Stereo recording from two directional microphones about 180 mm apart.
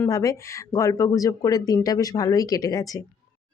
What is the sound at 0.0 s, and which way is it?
A woman's voice, 20° left (ahead or behind).